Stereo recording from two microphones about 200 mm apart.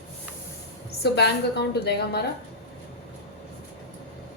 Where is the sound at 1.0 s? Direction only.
55° left (ahead or behind).